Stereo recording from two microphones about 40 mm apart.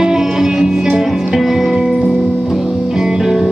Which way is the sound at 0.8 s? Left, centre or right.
Centre.